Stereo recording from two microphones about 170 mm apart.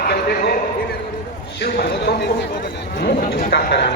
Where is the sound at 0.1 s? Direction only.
75° left (ahead or behind).